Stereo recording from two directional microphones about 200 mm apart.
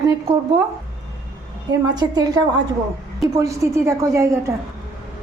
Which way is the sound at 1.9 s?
20° right (ahead or behind).